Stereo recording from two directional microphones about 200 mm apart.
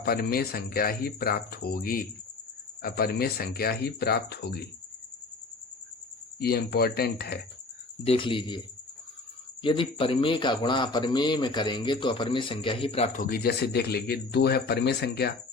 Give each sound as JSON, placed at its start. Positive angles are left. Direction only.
{"t": 0.0, "sound": "a man's voice", "side_deg": 50}
{"t": 6.4, "sound": "a man's voice", "side_deg": 50}
{"t": 8.0, "sound": "speech", "side_deg": 25}
{"t": 13.1, "sound": "a man's voice", "side_deg": 45}